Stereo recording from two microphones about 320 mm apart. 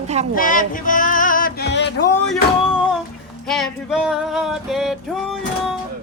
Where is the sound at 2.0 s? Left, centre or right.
Centre.